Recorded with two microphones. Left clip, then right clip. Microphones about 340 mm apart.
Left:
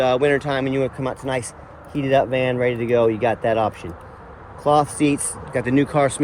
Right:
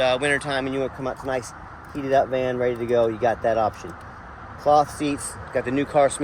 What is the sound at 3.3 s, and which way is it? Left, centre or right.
Speech, left.